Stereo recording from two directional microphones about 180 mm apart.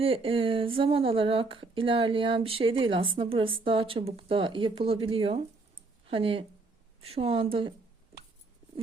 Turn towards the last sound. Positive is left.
turn(degrees=-30)  # may be behind; listen again after turning